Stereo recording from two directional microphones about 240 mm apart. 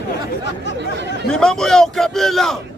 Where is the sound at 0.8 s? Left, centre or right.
Right.